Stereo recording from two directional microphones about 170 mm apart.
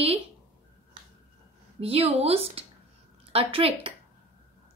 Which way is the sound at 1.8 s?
35° right (ahead or behind).